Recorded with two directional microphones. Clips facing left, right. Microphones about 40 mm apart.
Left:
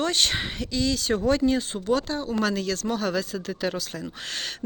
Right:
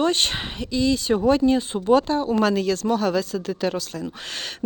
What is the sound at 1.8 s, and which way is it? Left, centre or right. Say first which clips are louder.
A woman's voice: right 8 dB; right.